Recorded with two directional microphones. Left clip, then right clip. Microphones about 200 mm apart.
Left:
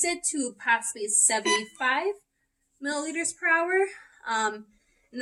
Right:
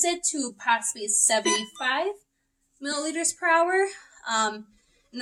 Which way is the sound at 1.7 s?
15° right (ahead or behind).